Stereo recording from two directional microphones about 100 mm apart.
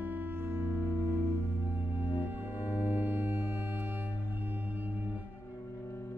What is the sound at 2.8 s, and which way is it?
Music, 20° right (ahead or behind).